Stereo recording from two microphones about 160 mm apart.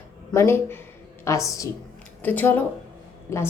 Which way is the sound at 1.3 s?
20° left (ahead or behind).